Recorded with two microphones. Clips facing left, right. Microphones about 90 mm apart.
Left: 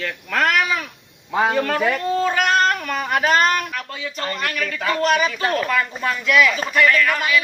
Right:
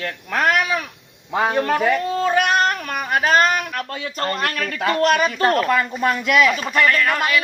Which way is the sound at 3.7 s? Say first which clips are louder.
Right 2 dB; 50° right (ahead or behind).